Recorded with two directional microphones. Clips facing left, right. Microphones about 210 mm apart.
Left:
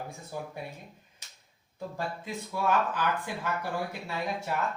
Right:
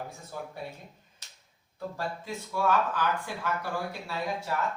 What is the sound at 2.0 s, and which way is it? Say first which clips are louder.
Speech: left 1 dB; 15° left (ahead or behind).